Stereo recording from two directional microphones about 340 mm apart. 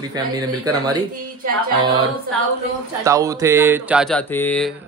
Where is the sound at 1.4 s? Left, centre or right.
Right.